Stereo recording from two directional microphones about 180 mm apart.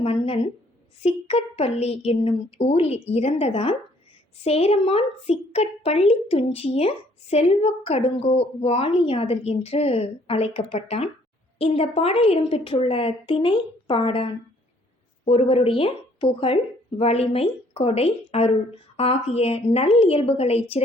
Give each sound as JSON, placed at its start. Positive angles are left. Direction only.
{"t": 0.0, "sound": "a woman's voice", "side_deg": 35}